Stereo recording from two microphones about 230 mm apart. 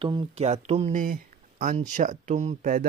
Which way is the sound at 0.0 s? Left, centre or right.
Right.